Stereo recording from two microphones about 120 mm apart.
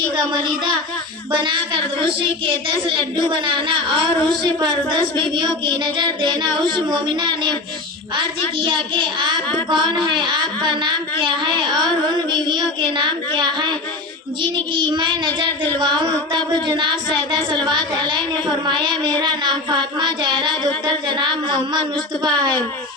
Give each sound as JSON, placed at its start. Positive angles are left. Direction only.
{"t": 0.4, "sound": "child singing", "side_deg": -40}
{"t": 1.3, "sound": "speech", "side_deg": -40}
{"t": 4.4, "sound": "child singing", "side_deg": -35}
{"t": 8.1, "sound": "speech", "side_deg": -45}
{"t": 9.6, "sound": "child singing", "side_deg": -40}